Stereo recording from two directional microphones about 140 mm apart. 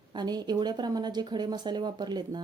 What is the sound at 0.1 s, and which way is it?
Speech, 30° right (ahead or behind).